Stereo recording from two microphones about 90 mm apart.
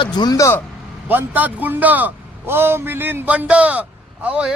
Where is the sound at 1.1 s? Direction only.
20° right (ahead or behind).